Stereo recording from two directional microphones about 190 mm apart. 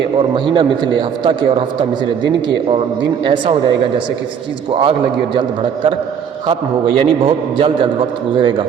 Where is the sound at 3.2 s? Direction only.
25° right (ahead or behind).